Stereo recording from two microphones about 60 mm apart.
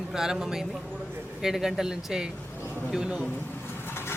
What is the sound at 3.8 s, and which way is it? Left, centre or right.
Vehicle, left.